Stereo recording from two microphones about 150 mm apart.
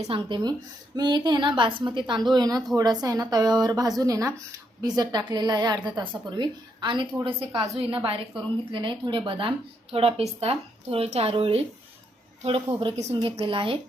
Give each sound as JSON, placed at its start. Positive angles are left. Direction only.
{"t": 0.0, "sound": "a woman's voice", "side_deg": -35}